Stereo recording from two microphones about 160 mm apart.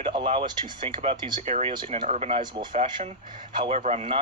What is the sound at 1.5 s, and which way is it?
Speech, 45° right (ahead or behind).